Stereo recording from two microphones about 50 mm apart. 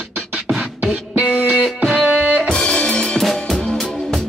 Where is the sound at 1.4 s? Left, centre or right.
Right.